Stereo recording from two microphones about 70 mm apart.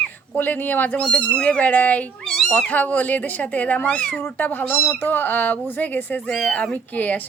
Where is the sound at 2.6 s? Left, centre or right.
Left.